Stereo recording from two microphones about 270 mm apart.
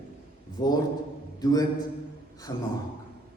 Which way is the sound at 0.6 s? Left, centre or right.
Centre.